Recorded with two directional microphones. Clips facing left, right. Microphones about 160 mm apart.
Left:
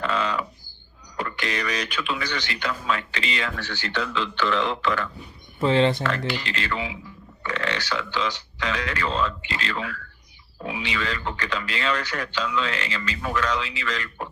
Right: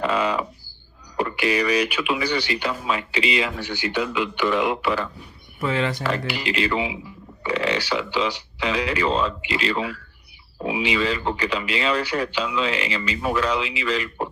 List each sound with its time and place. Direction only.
0.0 s a sound: 10° right (ahead or behind)
1.2 s speech: 10° right (ahead or behind)
5.5 s speech: 30° left (ahead or behind)
6.0 s speech: 10° right (ahead or behind)
7.4 s a sound: 10° right (ahead or behind)
8.3 s speech: 10° right (ahead or behind)
9.0 s speech: 35° right (ahead or behind)
9.4 s speech: 10° right (ahead or behind)